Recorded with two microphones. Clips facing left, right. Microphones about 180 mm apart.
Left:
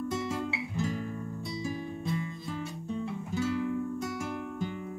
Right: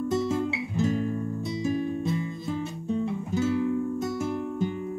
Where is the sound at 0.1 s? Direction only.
20° right (ahead or behind).